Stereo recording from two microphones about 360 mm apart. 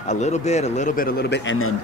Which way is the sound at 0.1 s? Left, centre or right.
Centre.